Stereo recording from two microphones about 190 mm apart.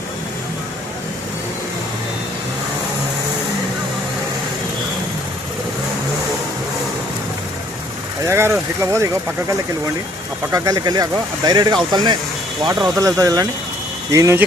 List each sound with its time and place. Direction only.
8.2 s vehicle: 15° right (ahead or behind)
8.8 s speech: 15° right (ahead or behind)